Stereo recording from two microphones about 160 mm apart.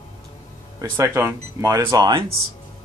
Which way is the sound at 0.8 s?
20° right (ahead or behind).